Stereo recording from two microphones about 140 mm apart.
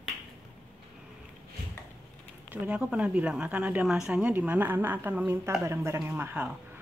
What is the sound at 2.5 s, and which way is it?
Speech, 10° right (ahead or behind).